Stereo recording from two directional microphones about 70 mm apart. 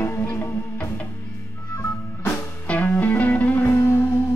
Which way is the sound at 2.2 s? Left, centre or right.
Left.